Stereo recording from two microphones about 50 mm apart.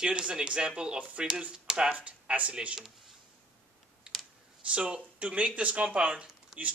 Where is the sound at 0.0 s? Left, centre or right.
Centre.